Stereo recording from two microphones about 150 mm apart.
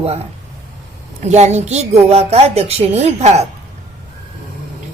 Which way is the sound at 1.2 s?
50° right (ahead or behind).